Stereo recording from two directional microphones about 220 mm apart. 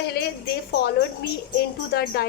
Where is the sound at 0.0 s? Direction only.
45° left (ahead or behind).